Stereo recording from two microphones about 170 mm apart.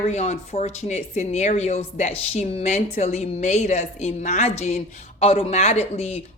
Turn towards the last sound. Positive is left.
turn(degrees=40)  # may be behind; listen again after turning